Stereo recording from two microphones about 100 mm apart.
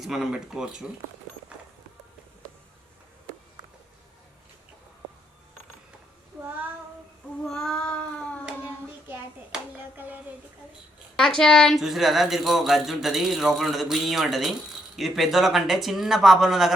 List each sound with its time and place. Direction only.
0.0 s speech: 5° right (ahead or behind)
7.4 s child singing: 5° left (ahead or behind)
8.4 s child singing: 20° right (ahead or behind)
9.9 s a sound: 20° right (ahead or behind)
11.2 s speech: 5° left (ahead or behind)